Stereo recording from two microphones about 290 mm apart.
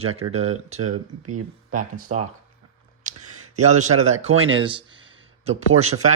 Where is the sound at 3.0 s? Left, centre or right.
Right.